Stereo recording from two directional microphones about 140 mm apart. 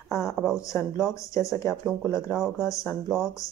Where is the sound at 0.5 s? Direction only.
20° left (ahead or behind).